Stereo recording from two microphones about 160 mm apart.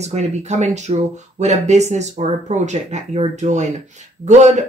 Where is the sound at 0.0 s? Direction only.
45° right (ahead or behind).